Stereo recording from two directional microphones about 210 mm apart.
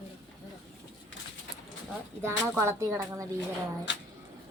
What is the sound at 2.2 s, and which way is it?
A woman's voice, 10° right (ahead or behind).